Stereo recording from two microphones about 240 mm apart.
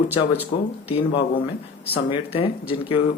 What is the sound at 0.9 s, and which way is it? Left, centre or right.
Speech, left.